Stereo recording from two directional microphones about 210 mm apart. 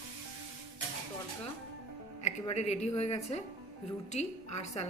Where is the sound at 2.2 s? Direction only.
30° left (ahead or behind).